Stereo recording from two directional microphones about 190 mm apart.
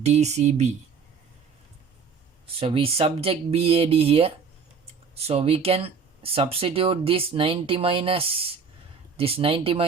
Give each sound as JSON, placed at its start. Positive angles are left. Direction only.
{"t": 0.0, "sound": "speech", "side_deg": -35}
{"t": 2.6, "sound": "speech", "side_deg": -30}